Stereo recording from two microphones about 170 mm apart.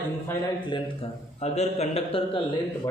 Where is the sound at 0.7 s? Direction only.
35° left (ahead or behind).